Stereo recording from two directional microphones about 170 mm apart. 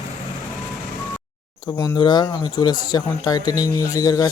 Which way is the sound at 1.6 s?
20° left (ahead or behind).